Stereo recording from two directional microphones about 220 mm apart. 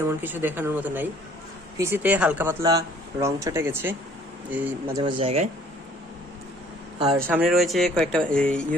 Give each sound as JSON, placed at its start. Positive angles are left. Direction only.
{"t": 0.0, "sound": "speech", "side_deg": -10}
{"t": 5.0, "sound": "speech", "side_deg": -25}
{"t": 7.3, "sound": "speech", "side_deg": -5}